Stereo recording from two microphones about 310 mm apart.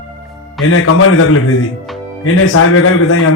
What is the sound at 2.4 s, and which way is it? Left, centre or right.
Speech, left.